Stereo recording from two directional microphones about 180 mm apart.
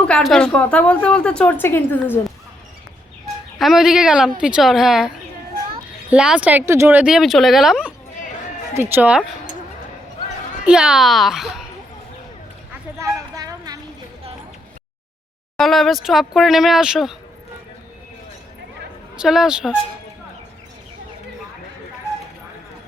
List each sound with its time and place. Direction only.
0.0 s a woman's voice: 5° left (ahead or behind)
3.6 s a woman's voice: centre (ahead or behind)
10.7 s a woman's voice: 5° right (ahead or behind)
13.0 s a sound: 15° right (ahead or behind)
15.5 s a woman's voice: centre (ahead or behind)
19.1 s a woman's voice: 5° right (ahead or behind)